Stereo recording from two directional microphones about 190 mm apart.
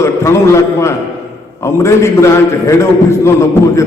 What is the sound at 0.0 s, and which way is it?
A man's voice, 15° left (ahead or behind).